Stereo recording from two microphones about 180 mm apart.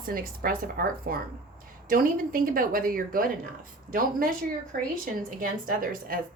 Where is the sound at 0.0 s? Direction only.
55° right (ahead or behind).